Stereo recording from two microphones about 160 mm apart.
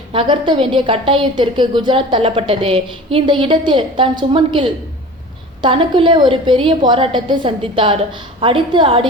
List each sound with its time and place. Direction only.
0.1 s a woman's voice: 30° right (ahead or behind)